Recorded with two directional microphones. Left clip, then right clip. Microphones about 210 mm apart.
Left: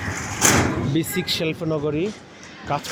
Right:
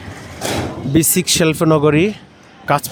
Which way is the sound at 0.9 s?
40° right (ahead or behind).